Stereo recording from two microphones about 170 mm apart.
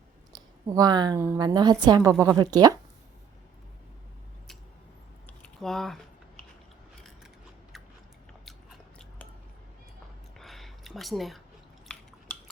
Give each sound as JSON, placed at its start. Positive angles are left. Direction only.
{"t": 0.3, "sound": "a woman's voice", "side_deg": -20}
{"t": 5.2, "sound": "typing", "side_deg": 5}
{"t": 7.7, "sound": "chewing", "side_deg": 0}
{"t": 10.3, "sound": "a sound", "side_deg": 0}
{"t": 12.3, "sound": "cutlery", "side_deg": 10}